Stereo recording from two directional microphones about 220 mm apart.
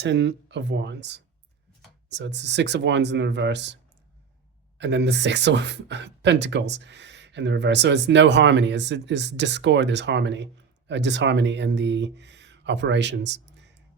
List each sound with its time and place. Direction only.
0.0 s speech: 55° right (ahead or behind)
4.8 s speech: 50° right (ahead or behind)